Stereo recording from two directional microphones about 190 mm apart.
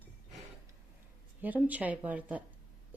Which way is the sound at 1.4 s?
10° right (ahead or behind).